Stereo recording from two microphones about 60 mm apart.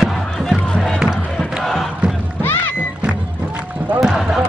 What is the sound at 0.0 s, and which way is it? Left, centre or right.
Music, centre.